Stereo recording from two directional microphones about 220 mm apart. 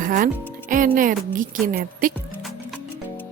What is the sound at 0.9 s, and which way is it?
A woman's voice, 40° right (ahead or behind).